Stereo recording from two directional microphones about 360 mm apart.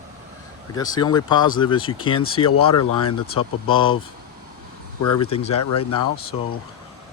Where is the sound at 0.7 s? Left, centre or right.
Centre.